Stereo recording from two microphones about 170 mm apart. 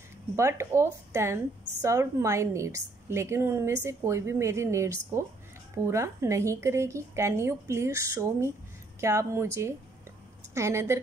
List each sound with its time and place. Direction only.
0.4 s a woman's voice: 15° right (ahead or behind)